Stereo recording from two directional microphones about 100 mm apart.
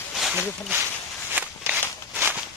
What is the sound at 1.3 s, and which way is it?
Walk, 20° right (ahead or behind).